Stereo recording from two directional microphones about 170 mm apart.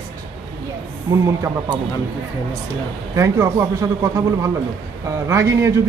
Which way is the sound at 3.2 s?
20° right (ahead or behind).